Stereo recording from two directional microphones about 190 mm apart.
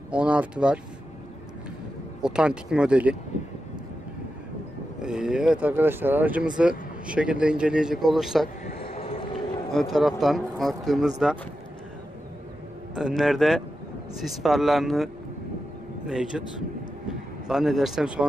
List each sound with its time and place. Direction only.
0.1 s speech: 5° right (ahead or behind)
2.2 s speech: 5° right (ahead or behind)
5.0 s speech: 5° right (ahead or behind)
8.8 s run: 30° left (ahead or behind)
9.8 s speech: centre (ahead or behind)
12.9 s speech: 5° right (ahead or behind)
16.1 s speech: 5° right (ahead or behind)
17.5 s speech: centre (ahead or behind)